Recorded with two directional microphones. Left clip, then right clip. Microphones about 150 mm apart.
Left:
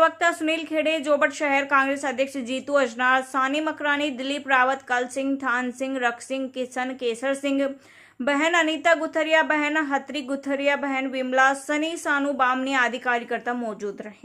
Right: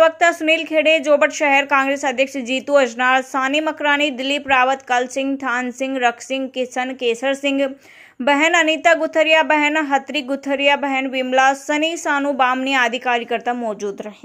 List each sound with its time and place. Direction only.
0.0 s a woman's voice: 25° right (ahead or behind)